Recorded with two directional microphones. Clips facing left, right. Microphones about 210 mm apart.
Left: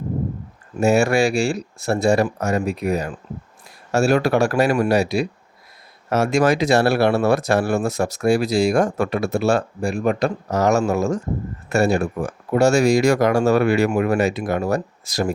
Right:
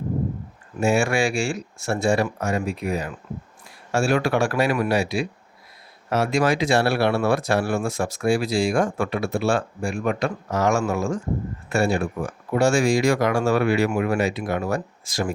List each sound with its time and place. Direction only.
0.8 s speech: 40° left (ahead or behind)